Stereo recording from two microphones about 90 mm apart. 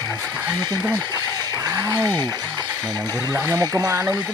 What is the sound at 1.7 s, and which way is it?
Speech, 40° right (ahead or behind).